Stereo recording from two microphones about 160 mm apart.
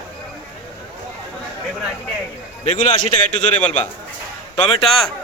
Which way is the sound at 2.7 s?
45° left (ahead or behind).